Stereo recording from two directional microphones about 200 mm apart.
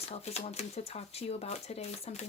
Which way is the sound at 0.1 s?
30° left (ahead or behind).